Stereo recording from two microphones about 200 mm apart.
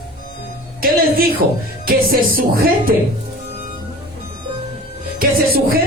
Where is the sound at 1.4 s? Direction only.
50° right (ahead or behind).